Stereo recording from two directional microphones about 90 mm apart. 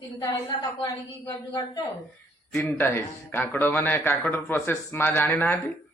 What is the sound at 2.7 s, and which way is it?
Speech, 25° left (ahead or behind).